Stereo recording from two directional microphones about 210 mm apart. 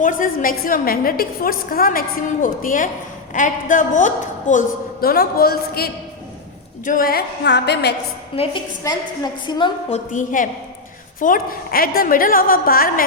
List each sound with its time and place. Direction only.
0.0 s a woman's voice: 40° left (ahead or behind)
8.4 s a woman's voice: 30° left (ahead or behind)
10.1 s a woman's voice: 40° left (ahead or behind)